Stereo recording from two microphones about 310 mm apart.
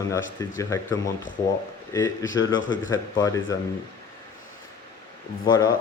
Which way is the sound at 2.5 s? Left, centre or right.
Left.